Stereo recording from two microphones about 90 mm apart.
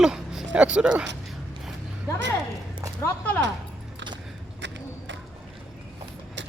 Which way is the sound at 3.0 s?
30° left (ahead or behind).